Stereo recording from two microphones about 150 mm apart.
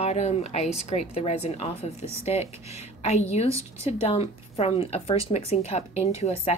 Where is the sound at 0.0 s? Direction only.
45° left (ahead or behind).